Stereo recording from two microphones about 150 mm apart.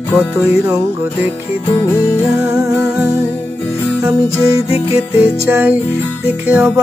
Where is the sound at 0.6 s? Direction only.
15° right (ahead or behind).